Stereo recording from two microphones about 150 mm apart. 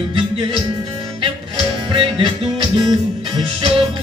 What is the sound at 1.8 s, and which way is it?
Music, 35° right (ahead or behind).